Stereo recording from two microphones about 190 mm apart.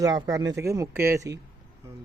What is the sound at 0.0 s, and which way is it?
Speech, 20° right (ahead or behind).